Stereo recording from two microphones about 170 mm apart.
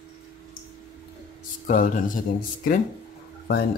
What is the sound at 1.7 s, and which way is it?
Speech, 55° left (ahead or behind).